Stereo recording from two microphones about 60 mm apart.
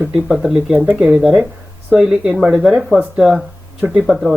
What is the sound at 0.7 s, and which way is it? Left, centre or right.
Speech, right.